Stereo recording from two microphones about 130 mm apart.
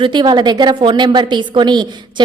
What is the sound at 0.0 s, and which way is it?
A woman's voice, 35° right (ahead or behind).